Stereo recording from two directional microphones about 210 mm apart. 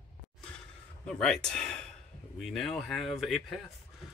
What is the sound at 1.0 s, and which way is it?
Speech, 5° left (ahead or behind).